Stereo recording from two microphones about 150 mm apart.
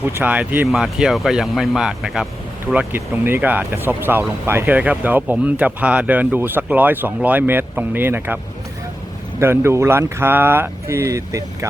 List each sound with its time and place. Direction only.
0.0 s speech: 10° right (ahead or behind)
2.7 s speech: 15° right (ahead or behind)
9.4 s speech: 15° right (ahead or behind)